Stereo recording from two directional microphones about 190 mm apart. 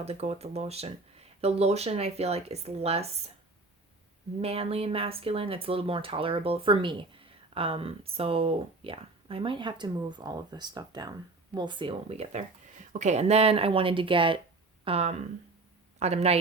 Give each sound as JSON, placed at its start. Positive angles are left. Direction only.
{"t": 0.0, "sound": "speech", "side_deg": -35}
{"t": 4.4, "sound": "speech", "side_deg": -30}